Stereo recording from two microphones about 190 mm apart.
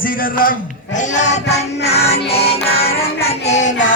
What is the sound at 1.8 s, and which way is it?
Music, 35° left (ahead or behind).